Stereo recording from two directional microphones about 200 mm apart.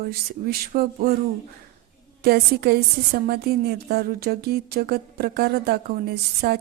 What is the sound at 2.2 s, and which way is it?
A woman's voice, 50° right (ahead or behind).